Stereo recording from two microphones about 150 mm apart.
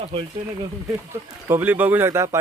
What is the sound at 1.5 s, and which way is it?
Speech, 15° right (ahead or behind).